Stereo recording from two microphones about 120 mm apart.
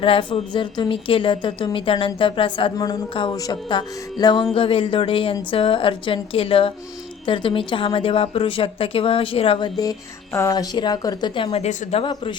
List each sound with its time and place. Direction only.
0.0 s a woman's voice: 45° left (ahead or behind)
2.7 s music: 35° left (ahead or behind)
4.5 s a woman's voice: 50° left (ahead or behind)
10.3 s music: 30° left (ahead or behind)
11.5 s a woman's voice: 65° left (ahead or behind)